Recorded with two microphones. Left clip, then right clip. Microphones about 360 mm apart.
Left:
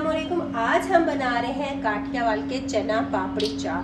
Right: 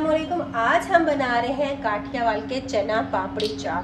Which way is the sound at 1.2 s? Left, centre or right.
Right.